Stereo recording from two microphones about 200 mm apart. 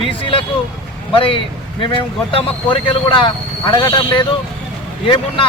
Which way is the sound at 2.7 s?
25° left (ahead or behind).